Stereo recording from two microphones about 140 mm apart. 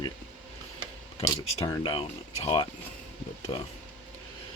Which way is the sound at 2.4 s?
40° left (ahead or behind).